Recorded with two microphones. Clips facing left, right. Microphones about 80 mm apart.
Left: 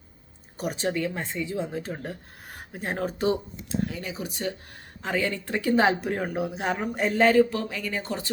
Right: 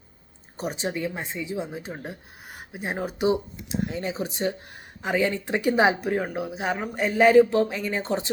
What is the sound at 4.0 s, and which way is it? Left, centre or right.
Speech, right.